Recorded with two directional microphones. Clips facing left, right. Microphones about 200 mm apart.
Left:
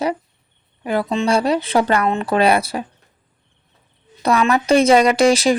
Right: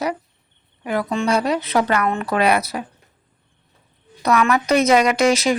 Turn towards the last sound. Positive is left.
turn(degrees=30)  # may be behind; listen again after turning